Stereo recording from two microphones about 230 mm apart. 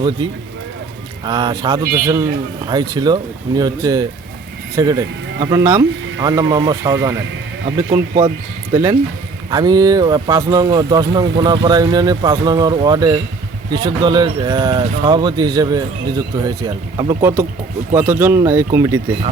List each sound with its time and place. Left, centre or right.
0.2 s speech: centre
8.7 s speech: centre